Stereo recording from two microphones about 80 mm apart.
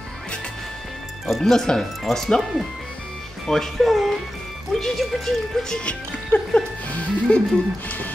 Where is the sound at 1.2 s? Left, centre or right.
Centre.